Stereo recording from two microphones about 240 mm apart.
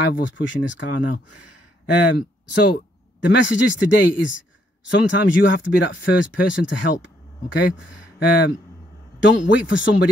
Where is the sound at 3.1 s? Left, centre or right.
Left.